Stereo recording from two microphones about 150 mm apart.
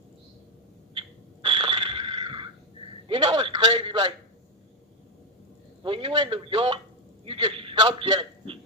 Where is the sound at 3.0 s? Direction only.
35° right (ahead or behind).